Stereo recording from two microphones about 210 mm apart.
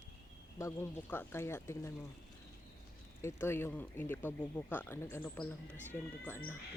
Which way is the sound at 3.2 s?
10° left (ahead or behind).